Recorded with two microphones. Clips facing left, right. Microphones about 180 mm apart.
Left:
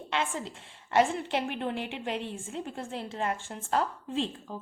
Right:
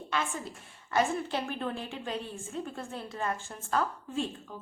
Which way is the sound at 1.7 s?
75° left (ahead or behind).